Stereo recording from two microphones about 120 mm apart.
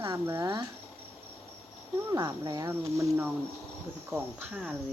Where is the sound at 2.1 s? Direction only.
35° right (ahead or behind).